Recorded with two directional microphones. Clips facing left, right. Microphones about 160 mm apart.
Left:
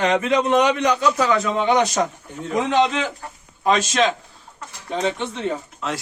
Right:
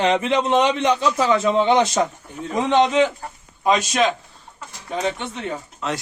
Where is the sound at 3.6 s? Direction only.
15° right (ahead or behind).